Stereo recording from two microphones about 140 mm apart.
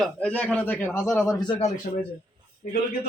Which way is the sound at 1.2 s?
25° left (ahead or behind).